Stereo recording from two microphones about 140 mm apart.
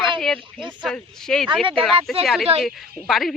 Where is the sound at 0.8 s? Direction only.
5° left (ahead or behind).